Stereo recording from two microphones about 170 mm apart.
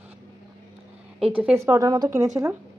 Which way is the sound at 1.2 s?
10° right (ahead or behind).